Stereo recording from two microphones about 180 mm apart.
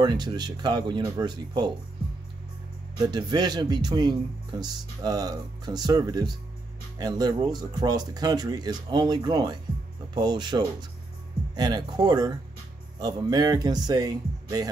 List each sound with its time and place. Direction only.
0.0 s a man's voice: 25° right (ahead or behind)
3.0 s a man's voice: 25° right (ahead or behind)